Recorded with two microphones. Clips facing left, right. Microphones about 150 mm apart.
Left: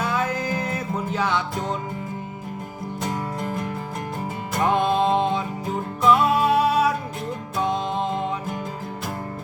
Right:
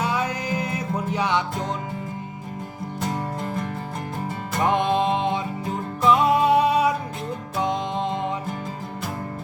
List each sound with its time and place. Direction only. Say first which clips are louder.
0.0 s music: left 1 dB; 15° right (ahead or behind)
4.6 s music: left 1 dB; 20° right (ahead or behind)